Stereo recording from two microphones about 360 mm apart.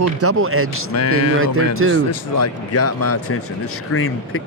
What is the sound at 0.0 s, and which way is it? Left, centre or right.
Speech, right.